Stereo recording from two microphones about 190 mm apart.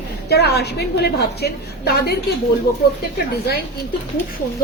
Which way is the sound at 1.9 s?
55° left (ahead or behind).